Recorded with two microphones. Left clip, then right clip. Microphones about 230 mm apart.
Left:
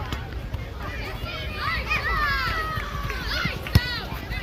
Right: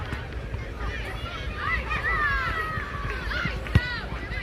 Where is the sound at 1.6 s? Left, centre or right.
Right.